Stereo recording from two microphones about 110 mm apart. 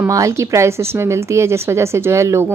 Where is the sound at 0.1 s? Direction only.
30° right (ahead or behind).